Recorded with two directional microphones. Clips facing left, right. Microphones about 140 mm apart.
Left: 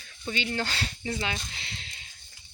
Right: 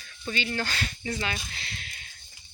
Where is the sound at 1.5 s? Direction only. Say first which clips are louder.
Right 1 dB; 20° left (ahead or behind).